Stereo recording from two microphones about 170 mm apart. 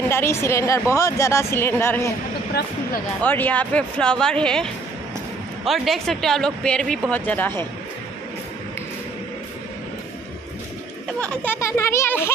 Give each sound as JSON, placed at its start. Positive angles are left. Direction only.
{"t": 0.1, "sound": "a woman's voice", "side_deg": 15}
{"t": 3.2, "sound": "speech", "side_deg": 10}
{"t": 11.1, "sound": "a woman's voice", "side_deg": 10}